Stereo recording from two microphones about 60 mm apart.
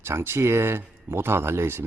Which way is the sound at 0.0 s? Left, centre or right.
Right.